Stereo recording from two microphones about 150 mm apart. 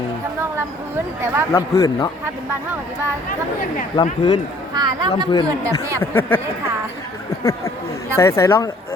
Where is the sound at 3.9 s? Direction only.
25° left (ahead or behind).